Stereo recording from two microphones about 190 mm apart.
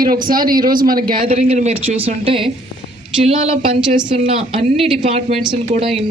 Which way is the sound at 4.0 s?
25° right (ahead or behind).